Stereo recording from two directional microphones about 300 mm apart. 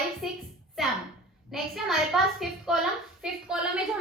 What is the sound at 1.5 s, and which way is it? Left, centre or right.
A woman's voice, centre.